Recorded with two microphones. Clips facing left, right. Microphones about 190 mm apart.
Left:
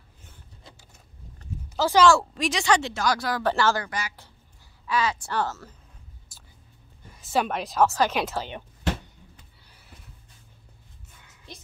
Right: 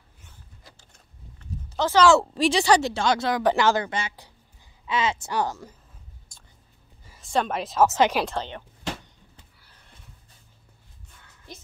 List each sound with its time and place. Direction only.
1.8 s speech: 10° left (ahead or behind)
2.1 s speech: 30° right (ahead or behind); by 5.8 s 15° right (ahead or behind)
6.3 s whispering: 5° left (ahead or behind)
7.1 s speech: 5° left (ahead or behind)
9.7 s a sound: 10° left (ahead or behind)